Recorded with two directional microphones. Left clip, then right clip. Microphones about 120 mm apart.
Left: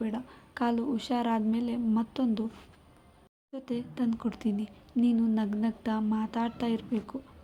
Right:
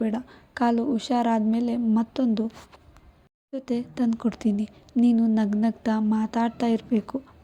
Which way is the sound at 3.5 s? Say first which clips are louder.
Right 7 dB; 45° right (ahead or behind).